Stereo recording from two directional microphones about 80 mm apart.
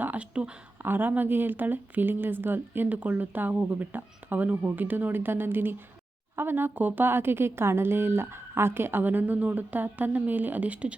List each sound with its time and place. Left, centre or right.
0.0 s speech: centre